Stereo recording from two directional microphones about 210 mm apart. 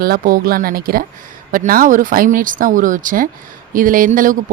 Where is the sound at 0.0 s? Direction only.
45° right (ahead or behind).